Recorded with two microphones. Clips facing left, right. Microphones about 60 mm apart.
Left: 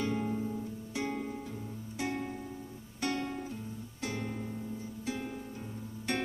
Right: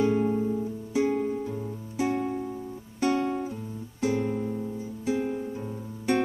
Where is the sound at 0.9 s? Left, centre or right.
Centre.